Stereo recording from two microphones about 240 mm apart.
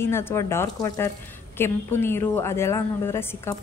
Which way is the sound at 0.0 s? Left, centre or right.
Centre.